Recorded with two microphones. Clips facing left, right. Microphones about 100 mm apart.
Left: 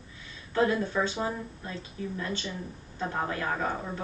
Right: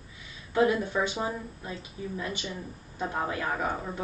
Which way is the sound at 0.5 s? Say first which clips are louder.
Right 1 dB; 15° right (ahead or behind).